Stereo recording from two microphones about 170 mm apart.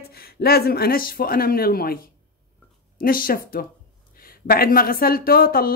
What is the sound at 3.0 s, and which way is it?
A woman's voice, 55° left (ahead or behind).